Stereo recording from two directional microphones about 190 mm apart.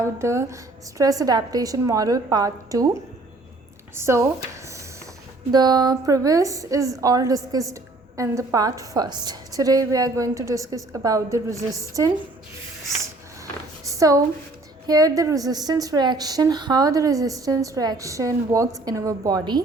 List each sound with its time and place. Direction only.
0.0 s a woman's voice: 15° right (ahead or behind)
5.5 s a woman's voice: 20° right (ahead or behind)
13.8 s a sound: 15° right (ahead or behind)
14.8 s a woman's voice: 20° right (ahead or behind)